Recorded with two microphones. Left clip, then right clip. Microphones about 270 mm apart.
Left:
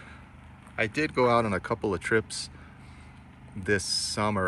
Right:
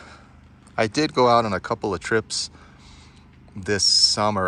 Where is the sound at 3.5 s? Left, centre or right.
Centre.